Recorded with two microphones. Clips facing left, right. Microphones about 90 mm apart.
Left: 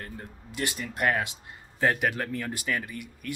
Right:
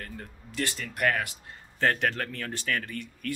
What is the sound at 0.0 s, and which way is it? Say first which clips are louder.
Speech: left 1 dB; 20° left (ahead or behind).